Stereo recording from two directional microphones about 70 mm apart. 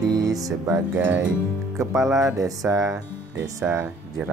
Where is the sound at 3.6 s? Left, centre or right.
Right.